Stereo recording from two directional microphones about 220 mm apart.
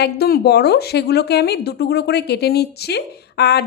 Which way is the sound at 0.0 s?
45° left (ahead or behind).